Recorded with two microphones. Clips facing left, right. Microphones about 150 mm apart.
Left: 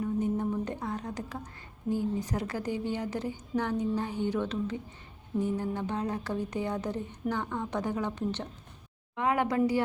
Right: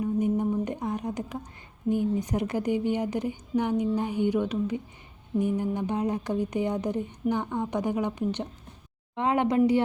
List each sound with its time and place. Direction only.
0.0 s a sound: 15° right (ahead or behind)
1.9 s speech: 20° right (ahead or behind)
9.1 s speech: 25° right (ahead or behind)